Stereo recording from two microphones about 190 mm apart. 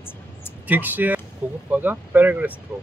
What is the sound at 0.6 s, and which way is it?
Speech, 10° right (ahead or behind).